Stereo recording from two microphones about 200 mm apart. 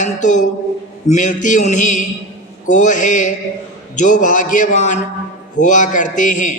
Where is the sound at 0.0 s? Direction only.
40° left (ahead or behind).